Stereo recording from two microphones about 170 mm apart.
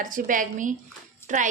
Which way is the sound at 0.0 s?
50° right (ahead or behind).